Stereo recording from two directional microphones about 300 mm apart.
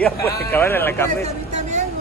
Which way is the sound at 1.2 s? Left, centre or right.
Right.